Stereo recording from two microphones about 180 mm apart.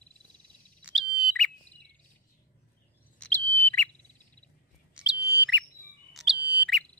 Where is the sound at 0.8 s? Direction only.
Centre (ahead or behind).